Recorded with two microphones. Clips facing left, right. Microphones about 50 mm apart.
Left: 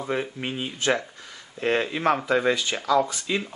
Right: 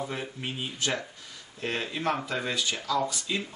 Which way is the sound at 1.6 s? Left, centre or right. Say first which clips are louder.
Left 7 dB; left.